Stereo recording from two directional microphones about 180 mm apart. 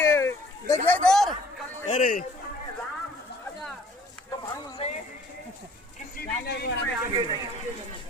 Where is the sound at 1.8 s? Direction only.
45° left (ahead or behind).